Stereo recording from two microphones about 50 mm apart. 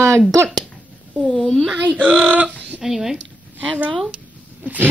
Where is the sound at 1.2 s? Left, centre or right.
Centre.